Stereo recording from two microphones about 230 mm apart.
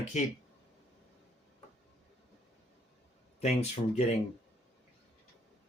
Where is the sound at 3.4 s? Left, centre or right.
Left.